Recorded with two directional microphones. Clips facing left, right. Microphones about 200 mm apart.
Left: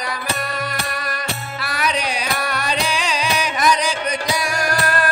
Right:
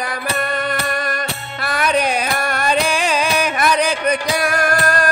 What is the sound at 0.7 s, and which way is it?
Music, 50° right (ahead or behind).